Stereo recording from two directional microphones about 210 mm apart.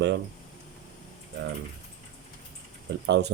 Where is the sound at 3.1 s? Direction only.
55° right (ahead or behind).